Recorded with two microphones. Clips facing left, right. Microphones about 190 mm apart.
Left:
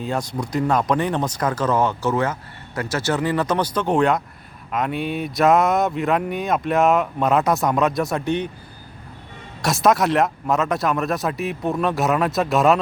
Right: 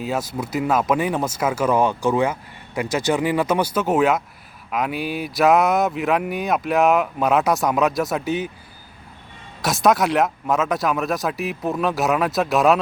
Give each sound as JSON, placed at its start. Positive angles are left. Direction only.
{"t": 0.0, "sound": "speech", "side_deg": -5}
{"t": 9.6, "sound": "speech", "side_deg": 0}